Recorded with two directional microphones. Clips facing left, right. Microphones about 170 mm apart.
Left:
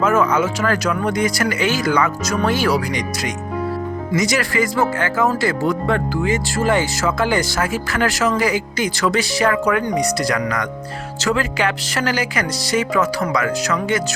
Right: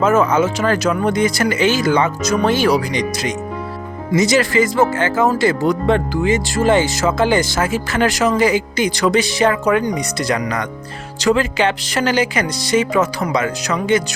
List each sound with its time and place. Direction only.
0.0 s speech: 25° right (ahead or behind)